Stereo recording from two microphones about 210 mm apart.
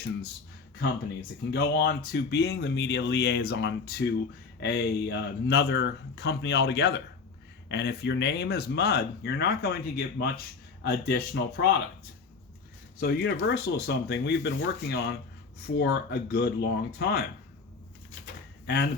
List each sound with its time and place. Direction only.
1.5 s speech: 50° left (ahead or behind)
13.0 s speech: 50° left (ahead or behind)
18.6 s speech: 50° left (ahead or behind)